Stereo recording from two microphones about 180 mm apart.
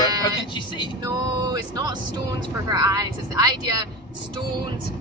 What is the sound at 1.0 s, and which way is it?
Speech, 20° right (ahead or behind).